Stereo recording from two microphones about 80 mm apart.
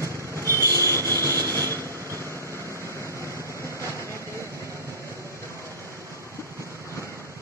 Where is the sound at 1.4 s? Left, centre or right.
Right.